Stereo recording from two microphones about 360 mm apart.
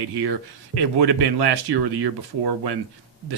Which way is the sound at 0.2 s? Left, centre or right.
Right.